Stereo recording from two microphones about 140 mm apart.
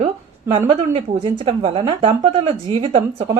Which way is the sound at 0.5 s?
45° right (ahead or behind).